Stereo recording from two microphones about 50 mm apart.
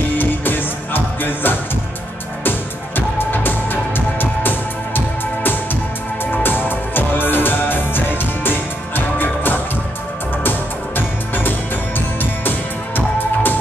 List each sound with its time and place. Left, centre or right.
0.2 s music: left
3.2 s music: left